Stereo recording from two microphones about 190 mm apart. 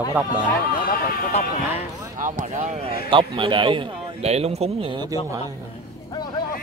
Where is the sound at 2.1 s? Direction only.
45° right (ahead or behind).